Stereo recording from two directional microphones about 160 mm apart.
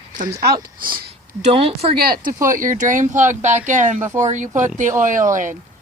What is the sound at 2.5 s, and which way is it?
Speech, 55° right (ahead or behind).